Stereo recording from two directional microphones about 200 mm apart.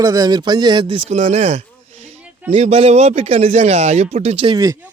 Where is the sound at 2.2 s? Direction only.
5° right (ahead or behind).